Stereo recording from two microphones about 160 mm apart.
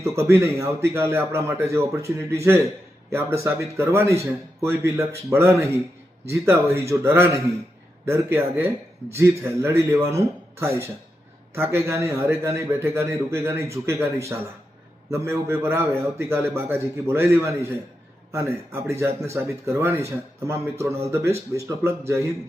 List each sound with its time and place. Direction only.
0.0 s a man's voice: 15° right (ahead or behind)